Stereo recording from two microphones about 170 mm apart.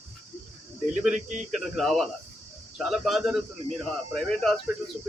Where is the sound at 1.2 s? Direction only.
45° right (ahead or behind).